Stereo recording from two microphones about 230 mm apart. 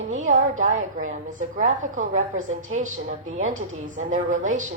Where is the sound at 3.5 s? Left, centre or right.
Right.